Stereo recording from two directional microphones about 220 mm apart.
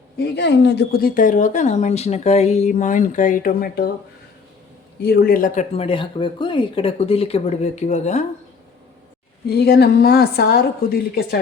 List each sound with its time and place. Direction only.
0.2 s speech: 50° left (ahead or behind)
5.0 s a woman's voice: 45° left (ahead or behind)
5.7 s speech: 25° left (ahead or behind)
9.5 s a woman's voice: 45° left (ahead or behind)